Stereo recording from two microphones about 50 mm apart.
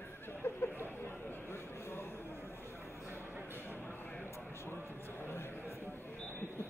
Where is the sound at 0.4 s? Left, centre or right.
Left.